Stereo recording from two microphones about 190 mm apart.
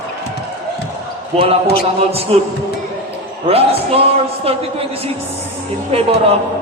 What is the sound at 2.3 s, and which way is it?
Speech, 30° right (ahead or behind).